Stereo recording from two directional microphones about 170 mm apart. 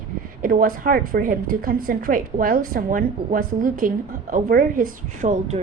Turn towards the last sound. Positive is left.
turn(degrees=-45)  # may be behind; listen again after turning